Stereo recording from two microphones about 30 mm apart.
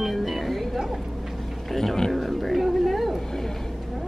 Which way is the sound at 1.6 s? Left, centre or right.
Centre.